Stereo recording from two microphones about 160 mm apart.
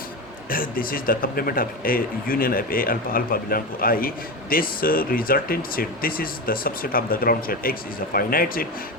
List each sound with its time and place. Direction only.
0.5 s speech: 65° left (ahead or behind)